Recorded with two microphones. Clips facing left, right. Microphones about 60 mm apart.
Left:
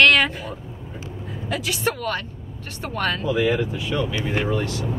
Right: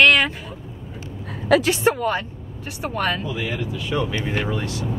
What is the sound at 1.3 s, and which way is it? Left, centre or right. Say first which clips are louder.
Vehicle: right 11 dB; right.